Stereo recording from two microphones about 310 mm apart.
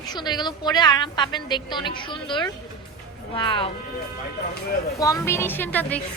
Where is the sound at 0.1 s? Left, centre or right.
Centre.